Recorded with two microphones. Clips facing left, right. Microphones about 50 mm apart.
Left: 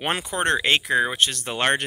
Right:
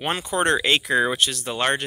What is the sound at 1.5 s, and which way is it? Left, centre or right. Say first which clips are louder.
Speech: left 1 dB; left.